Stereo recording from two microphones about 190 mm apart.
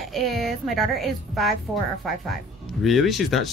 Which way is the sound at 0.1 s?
Centre (ahead or behind).